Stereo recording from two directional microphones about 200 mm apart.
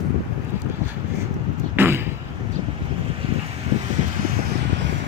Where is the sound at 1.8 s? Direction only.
10° right (ahead or behind).